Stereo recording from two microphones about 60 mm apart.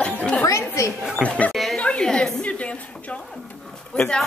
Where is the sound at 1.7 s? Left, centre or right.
Centre.